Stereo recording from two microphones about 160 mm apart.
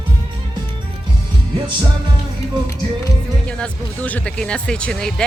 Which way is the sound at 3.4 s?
5° left (ahead or behind).